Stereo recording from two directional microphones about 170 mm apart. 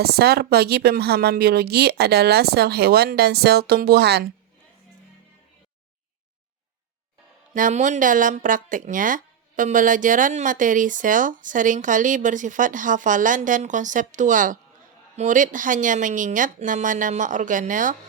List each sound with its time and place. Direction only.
0.0 s a woman's voice: 70° right (ahead or behind)
7.5 s speech: 50° right (ahead or behind)